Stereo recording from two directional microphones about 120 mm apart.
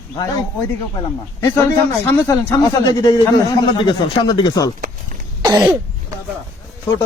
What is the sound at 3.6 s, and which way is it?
Speech, 40° left (ahead or behind).